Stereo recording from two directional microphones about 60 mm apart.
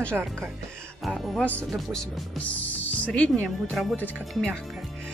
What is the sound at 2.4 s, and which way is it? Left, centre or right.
Speech, left.